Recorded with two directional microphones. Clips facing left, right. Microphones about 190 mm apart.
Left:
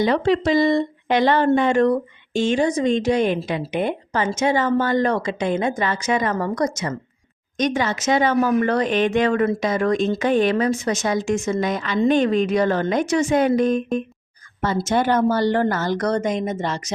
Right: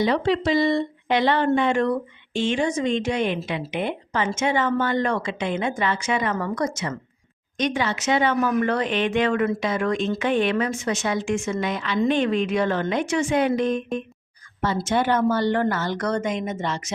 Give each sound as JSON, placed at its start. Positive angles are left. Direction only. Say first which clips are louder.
{"t": 0.0, "sound": "speech", "louder": "left 3 dB", "side_deg": 45}